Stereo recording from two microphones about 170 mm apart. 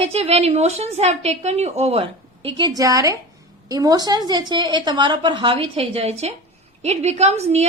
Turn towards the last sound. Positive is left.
turn(degrees=-40)  # may be behind; listen again after turning